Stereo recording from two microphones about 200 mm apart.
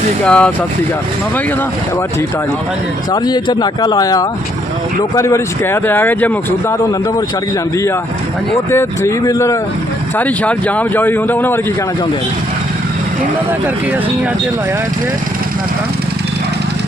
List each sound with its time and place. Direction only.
0.3 s speech: 5° left (ahead or behind)
3.1 s speech: 20° left (ahead or behind)
8.5 s speech: 15° left (ahead or behind)